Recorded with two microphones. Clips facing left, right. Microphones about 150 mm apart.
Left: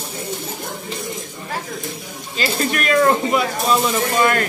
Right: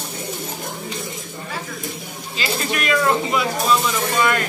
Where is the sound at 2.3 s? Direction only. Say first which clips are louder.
Left 3 dB; 45° left (ahead or behind).